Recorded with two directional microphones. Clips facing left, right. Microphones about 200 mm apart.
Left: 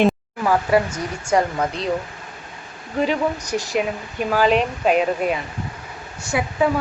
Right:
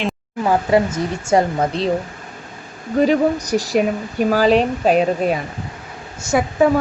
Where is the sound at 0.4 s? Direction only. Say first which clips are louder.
Right 2 dB; 25° right (ahead or behind).